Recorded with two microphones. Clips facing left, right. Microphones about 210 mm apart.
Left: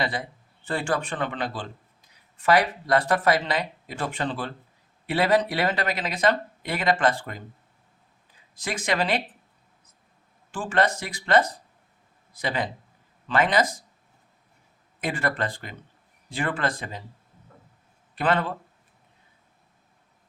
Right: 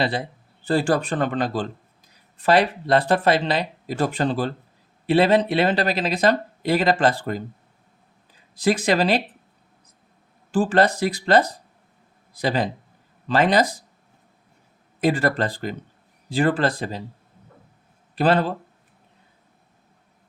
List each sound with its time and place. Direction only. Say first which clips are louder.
0.0 s speech: right 5 dB; 30° right (ahead or behind)
2.4 s speech: right 3 dB; 30° right (ahead or behind)
5.0 s speech: right 5 dB; 25° right (ahead or behind)
8.6 s speech: right 7 dB; 35° right (ahead or behind)
10.5 s speech: right 6 dB; 35° right (ahead or behind)
15.0 s speech: right 7 dB; 35° right (ahead or behind)
18.1 s speech: right 5 dB; 35° right (ahead or behind)